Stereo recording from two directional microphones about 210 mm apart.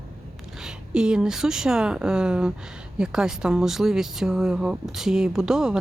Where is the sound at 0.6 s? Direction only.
5° right (ahead or behind).